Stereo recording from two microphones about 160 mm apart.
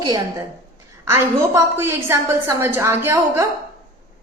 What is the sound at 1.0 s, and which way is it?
A woman's voice, 15° right (ahead or behind).